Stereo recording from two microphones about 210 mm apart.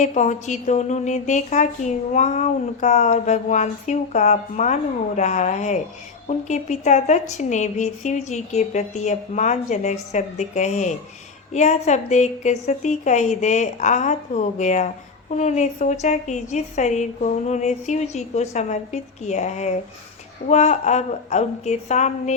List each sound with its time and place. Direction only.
0.0 s a woman's voice: 35° left (ahead or behind)